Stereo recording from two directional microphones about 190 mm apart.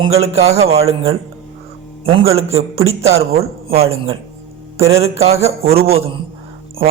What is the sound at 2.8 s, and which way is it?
A man's voice, 35° right (ahead or behind).